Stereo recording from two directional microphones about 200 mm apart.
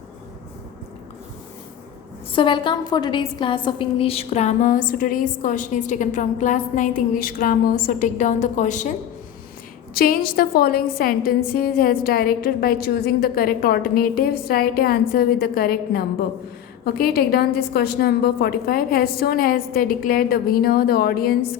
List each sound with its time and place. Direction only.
2.3 s a woman's voice: 25° left (ahead or behind)
9.9 s a woman's voice: 45° left (ahead or behind)